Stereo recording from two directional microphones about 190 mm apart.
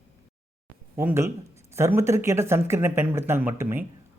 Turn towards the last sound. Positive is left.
turn(degrees=-10)  # may be behind; listen again after turning